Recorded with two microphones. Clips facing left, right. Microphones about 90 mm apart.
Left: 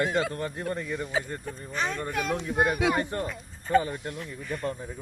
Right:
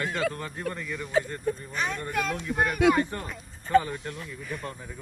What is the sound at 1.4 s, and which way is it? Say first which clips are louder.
Speech: right 2 dB; 5° right (ahead or behind).